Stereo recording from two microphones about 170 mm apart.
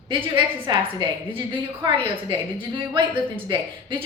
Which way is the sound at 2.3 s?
30° right (ahead or behind).